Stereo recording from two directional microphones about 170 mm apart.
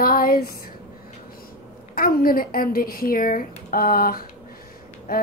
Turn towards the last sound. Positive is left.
turn(degrees=60)  # may be behind; listen again after turning